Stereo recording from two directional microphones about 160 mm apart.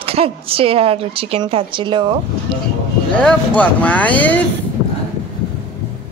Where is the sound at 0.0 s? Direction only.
35° right (ahead or behind).